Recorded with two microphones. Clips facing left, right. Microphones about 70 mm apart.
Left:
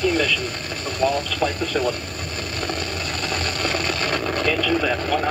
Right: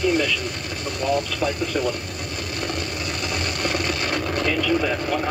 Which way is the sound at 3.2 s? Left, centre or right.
Left.